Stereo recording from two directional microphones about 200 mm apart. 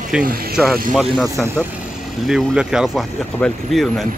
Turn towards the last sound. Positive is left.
turn(degrees=0)  # may be behind; listen again after turning